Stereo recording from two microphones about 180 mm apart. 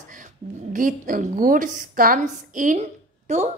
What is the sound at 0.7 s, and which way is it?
A woman's voice, 50° right (ahead or behind).